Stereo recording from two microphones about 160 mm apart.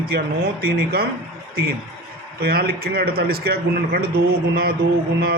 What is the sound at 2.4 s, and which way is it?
A man's voice, 75° right (ahead or behind).